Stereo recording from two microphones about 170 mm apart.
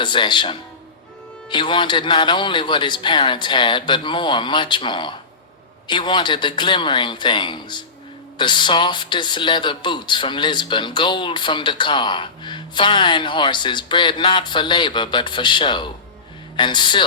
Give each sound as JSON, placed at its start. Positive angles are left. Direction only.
{"t": 0.0, "sound": "speech", "side_deg": 25}